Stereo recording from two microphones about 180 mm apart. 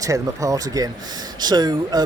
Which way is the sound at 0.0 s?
20° right (ahead or behind).